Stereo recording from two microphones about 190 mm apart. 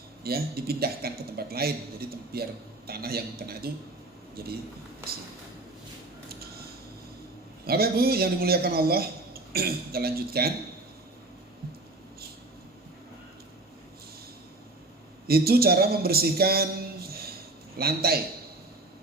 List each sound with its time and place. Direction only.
0.2 s a man's voice: 55° right (ahead or behind)
7.7 s a man's voice: 55° right (ahead or behind)
15.3 s a man's voice: 55° right (ahead or behind)
17.1 s a sound: 55° right (ahead or behind)
17.7 s a man's voice: 55° right (ahead or behind)